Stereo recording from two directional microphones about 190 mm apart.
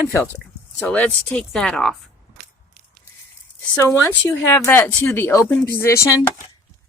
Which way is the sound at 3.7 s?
15° left (ahead or behind).